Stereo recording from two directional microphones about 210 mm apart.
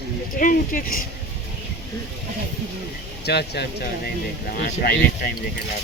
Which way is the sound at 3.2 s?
50° left (ahead or behind).